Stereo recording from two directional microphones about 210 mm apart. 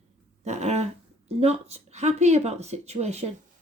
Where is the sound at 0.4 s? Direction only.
35° right (ahead or behind).